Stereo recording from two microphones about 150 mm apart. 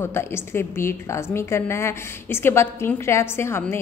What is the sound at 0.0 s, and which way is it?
Speech, 15° left (ahead or behind).